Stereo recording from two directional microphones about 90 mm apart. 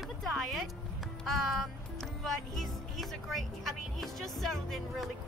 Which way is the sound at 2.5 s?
Centre (ahead or behind).